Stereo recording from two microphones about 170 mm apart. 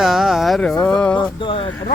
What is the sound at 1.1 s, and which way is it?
Speech, 30° left (ahead or behind).